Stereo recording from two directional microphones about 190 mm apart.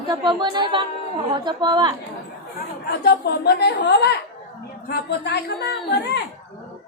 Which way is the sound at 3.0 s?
55° left (ahead or behind).